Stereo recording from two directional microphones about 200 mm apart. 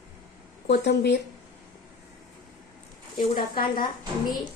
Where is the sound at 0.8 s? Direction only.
55° left (ahead or behind).